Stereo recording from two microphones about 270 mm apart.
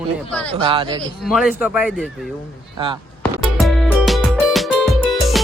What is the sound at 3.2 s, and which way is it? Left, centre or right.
Music, centre.